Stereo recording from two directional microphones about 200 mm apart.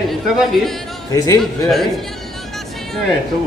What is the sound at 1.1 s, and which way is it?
Speech, 15° left (ahead or behind).